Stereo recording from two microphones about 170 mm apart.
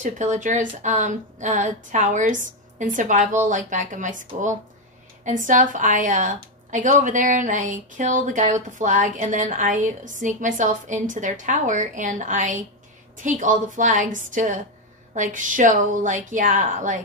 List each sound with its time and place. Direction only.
0.0 s a woman's voice: 45° right (ahead or behind)
5.2 s a woman's voice: 50° right (ahead or behind)